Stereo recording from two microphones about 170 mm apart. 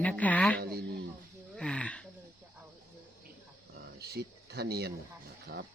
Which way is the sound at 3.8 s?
70° right (ahead or behind).